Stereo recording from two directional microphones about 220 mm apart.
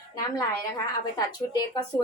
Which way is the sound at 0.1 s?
15° left (ahead or behind).